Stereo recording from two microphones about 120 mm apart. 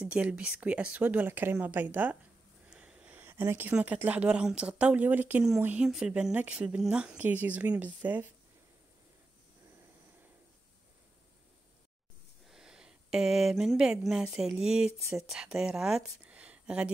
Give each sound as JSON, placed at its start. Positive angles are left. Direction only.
{"t": 0.0, "sound": "speech", "side_deg": -10}
{"t": 2.7, "sound": "a sound", "side_deg": -5}
{"t": 3.7, "sound": "speech", "side_deg": -15}
{"t": 12.4, "sound": "speech", "side_deg": -5}